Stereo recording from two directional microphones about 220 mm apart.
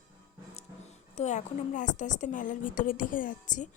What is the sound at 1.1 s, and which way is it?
A woman's voice, 30° left (ahead or behind).